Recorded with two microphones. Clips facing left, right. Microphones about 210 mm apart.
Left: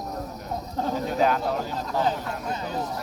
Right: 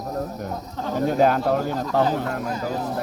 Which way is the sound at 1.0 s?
45° right (ahead or behind).